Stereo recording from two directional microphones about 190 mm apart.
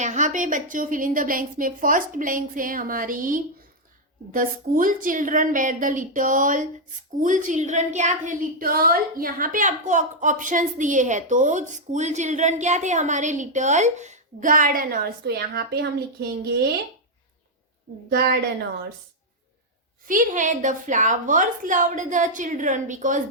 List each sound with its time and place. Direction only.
0.0 s a woman's voice: 40° right (ahead or behind); by 15.9 s 55° right (ahead or behind)
17.9 s a woman's voice: 45° right (ahead or behind)
20.1 s a woman's voice: 45° right (ahead or behind)